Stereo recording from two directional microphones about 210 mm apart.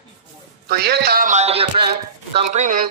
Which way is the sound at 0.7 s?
50° right (ahead or behind).